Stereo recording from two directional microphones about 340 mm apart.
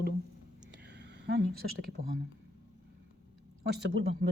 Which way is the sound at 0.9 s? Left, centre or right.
Right.